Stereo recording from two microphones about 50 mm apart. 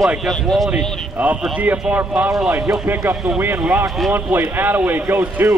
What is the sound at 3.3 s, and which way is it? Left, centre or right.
A man's voice, right.